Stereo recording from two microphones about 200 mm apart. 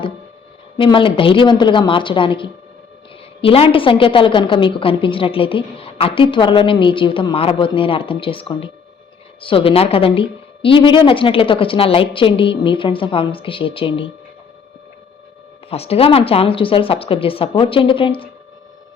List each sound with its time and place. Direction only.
0.8 s a woman's voice: 25° left (ahead or behind)
15.7 s a woman's voice: 30° left (ahead or behind)